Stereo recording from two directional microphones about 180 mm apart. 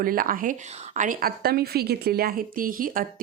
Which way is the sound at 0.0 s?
50° right (ahead or behind).